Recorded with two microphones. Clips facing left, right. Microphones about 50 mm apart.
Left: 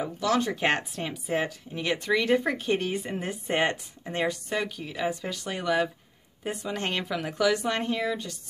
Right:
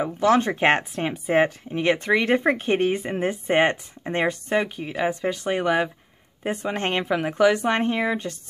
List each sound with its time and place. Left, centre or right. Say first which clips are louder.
0.0 s speech: right 7 dB; right